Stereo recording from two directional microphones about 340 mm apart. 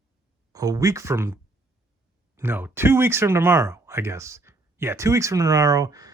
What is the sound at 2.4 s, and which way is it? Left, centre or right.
Speech, centre.